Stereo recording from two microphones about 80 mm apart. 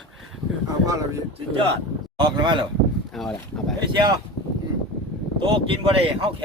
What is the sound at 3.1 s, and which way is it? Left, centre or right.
Speech, centre.